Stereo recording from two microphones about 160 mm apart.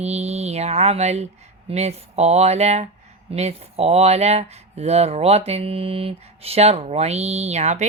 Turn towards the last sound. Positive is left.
turn(degrees=-45)  # may be behind; listen again after turning